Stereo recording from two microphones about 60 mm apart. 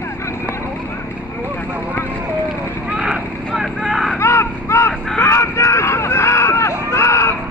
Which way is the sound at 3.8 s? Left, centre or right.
Centre.